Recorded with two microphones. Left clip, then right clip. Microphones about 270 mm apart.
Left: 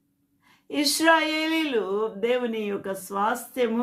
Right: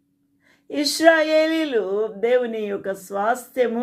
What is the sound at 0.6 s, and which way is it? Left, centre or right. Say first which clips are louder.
Speech: right 4 dB; centre.